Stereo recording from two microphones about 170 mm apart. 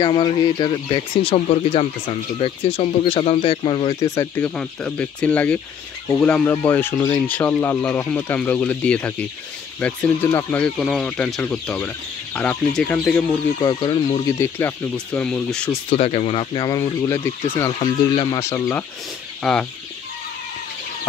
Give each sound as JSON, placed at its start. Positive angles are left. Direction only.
{"t": 0.0, "sound": "speech", "side_deg": 25}
{"t": 3.9, "sound": "speech", "side_deg": 20}
{"t": 4.6, "sound": "speech", "side_deg": 5}
{"t": 13.6, "sound": "speech", "side_deg": 25}
{"t": 15.1, "sound": "speech", "side_deg": 5}
{"t": 15.9, "sound": "speech", "side_deg": 35}
{"t": 18.4, "sound": "speech", "side_deg": 15}
{"t": 19.4, "sound": "speech", "side_deg": 0}